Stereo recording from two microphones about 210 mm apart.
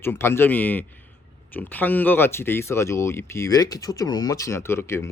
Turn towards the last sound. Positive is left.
turn(degrees=10)  # may be behind; listen again after turning